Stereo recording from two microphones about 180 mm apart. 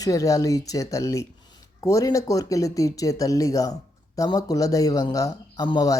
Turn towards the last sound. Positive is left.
turn(degrees=25)  # may be behind; listen again after turning